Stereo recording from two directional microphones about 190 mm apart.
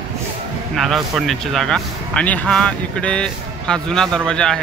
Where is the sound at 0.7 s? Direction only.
Centre (ahead or behind).